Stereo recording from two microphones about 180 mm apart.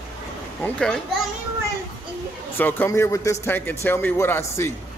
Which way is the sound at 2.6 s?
10° left (ahead or behind).